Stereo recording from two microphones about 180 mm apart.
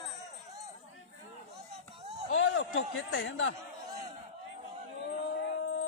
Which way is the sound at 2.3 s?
90° left.